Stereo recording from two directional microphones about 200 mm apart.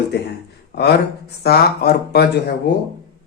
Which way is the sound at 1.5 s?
50° left (ahead or behind).